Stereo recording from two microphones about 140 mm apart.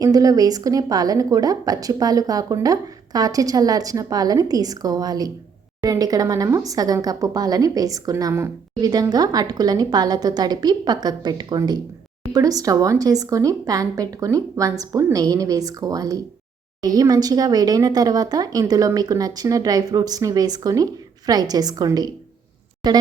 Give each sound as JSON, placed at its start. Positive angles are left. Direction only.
{"t": 0.0, "sound": "speech", "side_deg": -25}